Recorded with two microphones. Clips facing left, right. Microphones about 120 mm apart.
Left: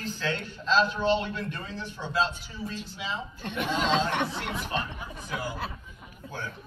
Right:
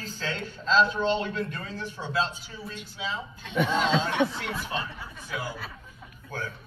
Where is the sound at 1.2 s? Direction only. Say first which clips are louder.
Right 3 dB; 40° right (ahead or behind).